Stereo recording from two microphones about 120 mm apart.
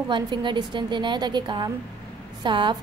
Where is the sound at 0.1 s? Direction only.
40° right (ahead or behind).